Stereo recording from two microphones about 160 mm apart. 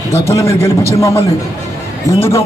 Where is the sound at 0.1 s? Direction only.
15° left (ahead or behind).